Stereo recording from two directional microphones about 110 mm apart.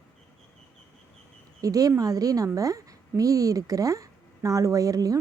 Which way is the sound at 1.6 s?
30° right (ahead or behind).